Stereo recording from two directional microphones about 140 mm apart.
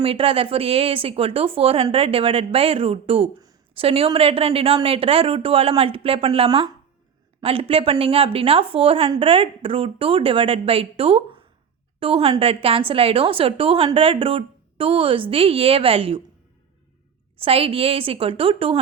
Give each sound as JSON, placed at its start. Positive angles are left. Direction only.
{"t": 0.0, "sound": "a woman's voice", "side_deg": -40}
{"t": 17.4, "sound": "a woman's voice", "side_deg": -40}